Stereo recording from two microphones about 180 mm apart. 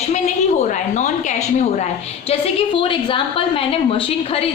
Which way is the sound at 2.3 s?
30° left (ahead or behind).